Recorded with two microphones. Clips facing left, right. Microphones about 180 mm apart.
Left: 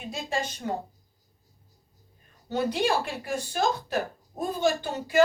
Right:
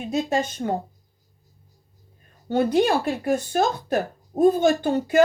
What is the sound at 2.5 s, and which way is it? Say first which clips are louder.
A woman's voice: right 6 dB; 50° right (ahead or behind).